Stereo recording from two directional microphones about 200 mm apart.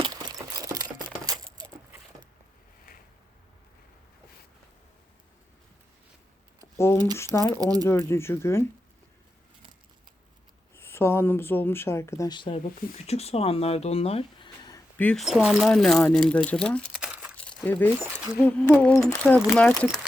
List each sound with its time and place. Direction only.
0.0 s a sound: 20° right (ahead or behind)
6.7 s speech: 15° left (ahead or behind)
7.6 s speech: 20° right (ahead or behind)
7.9 s speech: 15° left (ahead or behind)
10.8 s speech: 10° left (ahead or behind)
14.9 s speech: 5° left (ahead or behind)
17.3 s crumpling: 5° left (ahead or behind)
18.0 s speech: 5° right (ahead or behind)
18.4 s speech: 10° left (ahead or behind)